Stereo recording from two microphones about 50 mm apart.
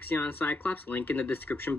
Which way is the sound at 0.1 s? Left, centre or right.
Left.